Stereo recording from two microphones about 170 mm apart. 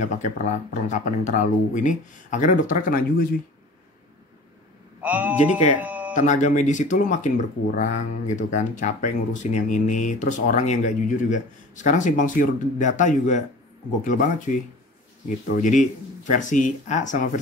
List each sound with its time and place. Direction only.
0.2 s speech: 45° left (ahead or behind)
5.0 s speech: 10° right (ahead or behind)
6.1 s speech: 45° left (ahead or behind)